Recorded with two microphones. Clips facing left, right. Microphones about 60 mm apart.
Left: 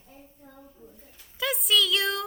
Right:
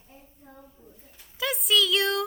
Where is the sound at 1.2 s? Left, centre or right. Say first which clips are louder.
Even; centre.